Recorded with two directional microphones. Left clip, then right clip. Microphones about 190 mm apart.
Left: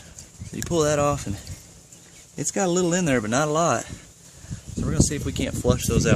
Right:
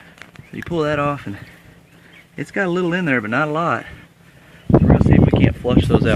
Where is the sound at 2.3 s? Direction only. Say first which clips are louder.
Right 3 dB; 20° left (ahead or behind).